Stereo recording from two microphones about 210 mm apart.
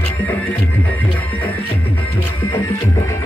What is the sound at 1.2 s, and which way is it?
Music, 5° left (ahead or behind).